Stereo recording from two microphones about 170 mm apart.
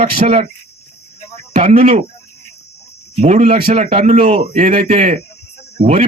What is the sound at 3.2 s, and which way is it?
A man's voice, 40° right (ahead or behind).